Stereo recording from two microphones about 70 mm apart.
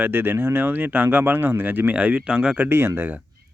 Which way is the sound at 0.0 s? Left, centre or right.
Right.